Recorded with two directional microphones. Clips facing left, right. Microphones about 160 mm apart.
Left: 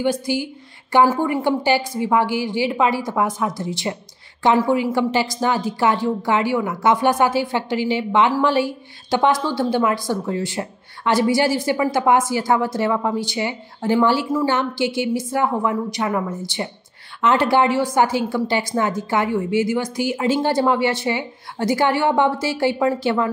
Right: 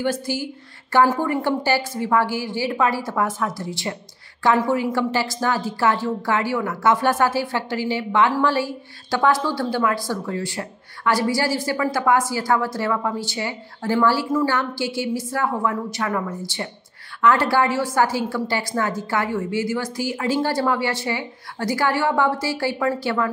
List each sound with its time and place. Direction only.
0.0 s a woman's voice: 15° left (ahead or behind)